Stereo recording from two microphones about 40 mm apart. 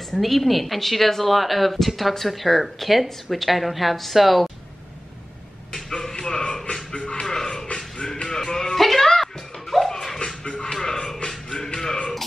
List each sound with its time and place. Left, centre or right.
0.1 s speech: centre
6.7 s music: left
7.3 s music: centre
8.7 s a sound: centre
9.8 s music: centre